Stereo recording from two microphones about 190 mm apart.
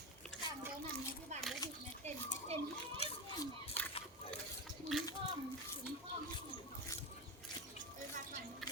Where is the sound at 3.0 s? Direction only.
35° left (ahead or behind).